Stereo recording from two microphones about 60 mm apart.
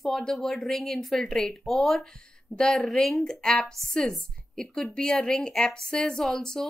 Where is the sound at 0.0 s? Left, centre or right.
Centre.